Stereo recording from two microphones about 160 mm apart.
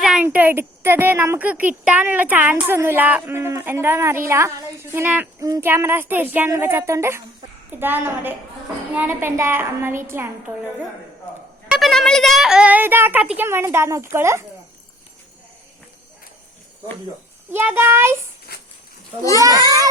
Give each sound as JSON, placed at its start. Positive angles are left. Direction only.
{"t": 0.0, "sound": "a sound", "side_deg": -5}
{"t": 0.3, "sound": "speech", "side_deg": -15}
{"t": 11.7, "sound": "speech", "side_deg": 0}
{"t": 17.5, "sound": "speech", "side_deg": -15}
{"t": 18.5, "sound": "a sound", "side_deg": 80}
{"t": 19.4, "sound": "a child's voice", "side_deg": -20}